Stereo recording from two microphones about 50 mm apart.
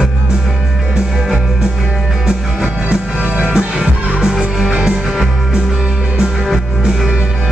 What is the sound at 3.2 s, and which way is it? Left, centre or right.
Music, right.